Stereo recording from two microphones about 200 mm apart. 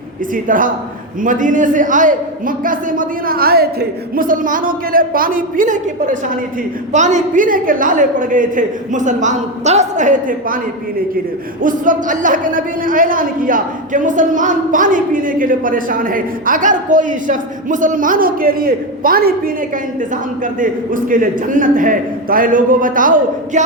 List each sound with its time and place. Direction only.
0.3 s a man's voice: 45° right (ahead or behind)
11.6 s a man's voice: 40° right (ahead or behind)